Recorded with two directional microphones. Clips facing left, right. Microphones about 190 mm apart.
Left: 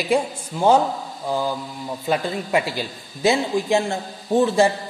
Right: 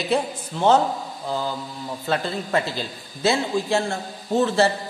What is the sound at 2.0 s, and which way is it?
A man's voice, 15° left (ahead or behind).